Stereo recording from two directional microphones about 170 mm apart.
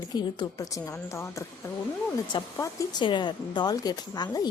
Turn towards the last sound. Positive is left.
turn(degrees=25)  # may be behind; listen again after turning